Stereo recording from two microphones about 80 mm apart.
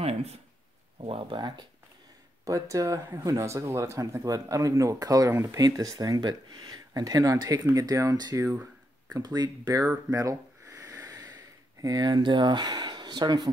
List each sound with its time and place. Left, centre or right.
1.3 s speech: right
2.4 s speech: right
5.3 s speech: right
5.7 s speech: right
10.1 s gasp: right
11.8 s speech: right
12.2 s speech: right